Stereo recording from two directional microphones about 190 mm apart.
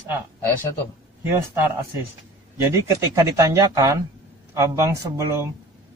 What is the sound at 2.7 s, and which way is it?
Speech, 15° right (ahead or behind).